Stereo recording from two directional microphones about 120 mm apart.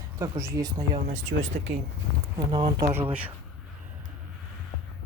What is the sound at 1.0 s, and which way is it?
Speech, 85° right.